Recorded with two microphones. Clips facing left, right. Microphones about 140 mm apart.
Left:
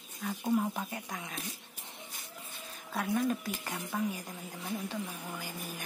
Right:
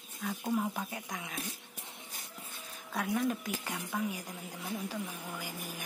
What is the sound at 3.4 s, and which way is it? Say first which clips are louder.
Speech: even; 10° right (ahead or behind).